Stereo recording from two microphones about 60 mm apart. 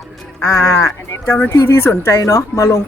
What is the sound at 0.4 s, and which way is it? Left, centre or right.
Speech, left.